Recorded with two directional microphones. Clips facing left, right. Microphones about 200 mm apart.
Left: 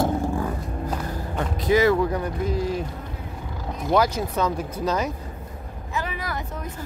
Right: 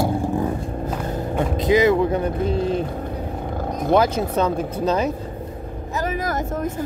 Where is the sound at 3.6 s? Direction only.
55° right (ahead or behind).